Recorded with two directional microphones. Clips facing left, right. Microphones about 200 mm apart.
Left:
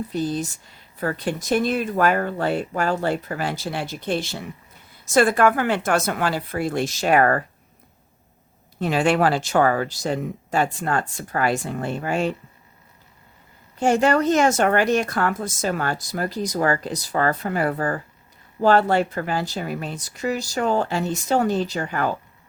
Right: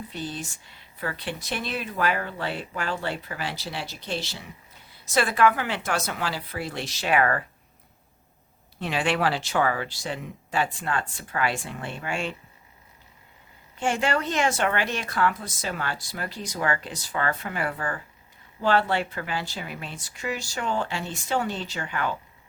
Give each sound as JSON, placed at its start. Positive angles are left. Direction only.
{"t": 0.1, "sound": "speech", "side_deg": 40}
{"t": 8.8, "sound": "speech", "side_deg": 45}
{"t": 13.7, "sound": "a woman's voice", "side_deg": 40}